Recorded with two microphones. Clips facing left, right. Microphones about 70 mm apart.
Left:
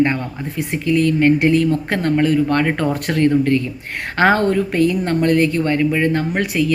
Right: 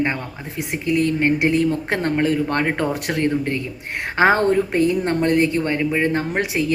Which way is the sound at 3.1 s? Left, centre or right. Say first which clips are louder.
Left 6 dB; centre.